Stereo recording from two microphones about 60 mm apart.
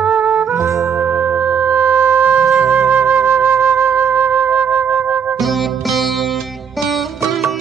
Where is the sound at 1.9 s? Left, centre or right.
Right.